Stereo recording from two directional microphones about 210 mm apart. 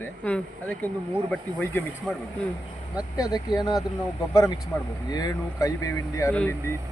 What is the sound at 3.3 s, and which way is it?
A man's voice, 20° left (ahead or behind).